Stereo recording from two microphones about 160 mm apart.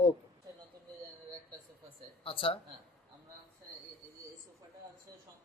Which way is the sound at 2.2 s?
35° left (ahead or behind).